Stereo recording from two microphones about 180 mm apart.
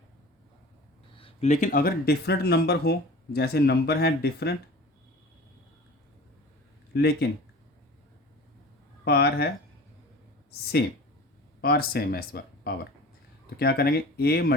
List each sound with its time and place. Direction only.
1.1 s speech: 35° left (ahead or behind); by 4.5 s 65° left (ahead or behind)
6.9 s speech: 65° left (ahead or behind)
9.0 s speech: 60° left (ahead or behind)
11.6 s speech: 60° left (ahead or behind)